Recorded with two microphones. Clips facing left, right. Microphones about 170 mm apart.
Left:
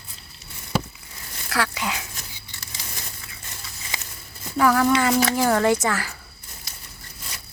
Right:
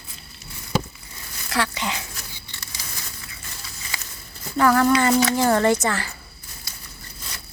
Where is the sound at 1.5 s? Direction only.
5° left (ahead or behind).